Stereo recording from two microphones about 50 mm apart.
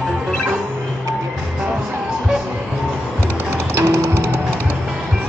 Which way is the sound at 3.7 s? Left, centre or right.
Right.